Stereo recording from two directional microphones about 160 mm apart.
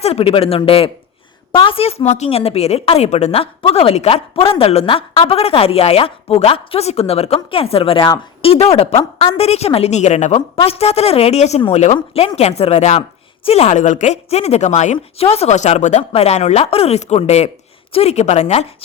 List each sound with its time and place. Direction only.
0.0 s a woman's voice: 40° left (ahead or behind)